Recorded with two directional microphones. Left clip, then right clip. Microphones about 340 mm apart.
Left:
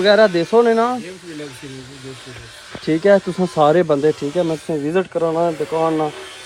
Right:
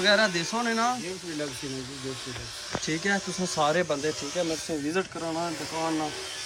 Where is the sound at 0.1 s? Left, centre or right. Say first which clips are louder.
Left 13 dB; centre.